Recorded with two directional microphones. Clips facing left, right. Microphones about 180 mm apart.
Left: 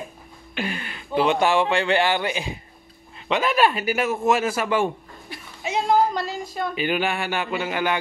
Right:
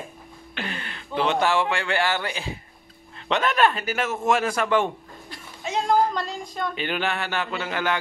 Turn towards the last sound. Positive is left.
turn(degrees=15)  # may be behind; listen again after turning